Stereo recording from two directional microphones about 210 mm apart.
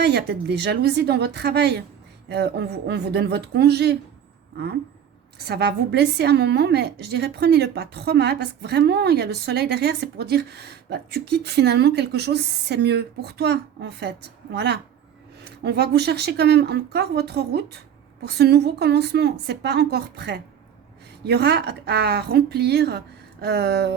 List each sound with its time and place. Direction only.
0.0 s a woman's voice: 50° right (ahead or behind)